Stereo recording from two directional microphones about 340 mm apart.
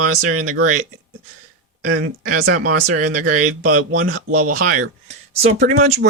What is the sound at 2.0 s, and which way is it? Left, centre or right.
Speech, right.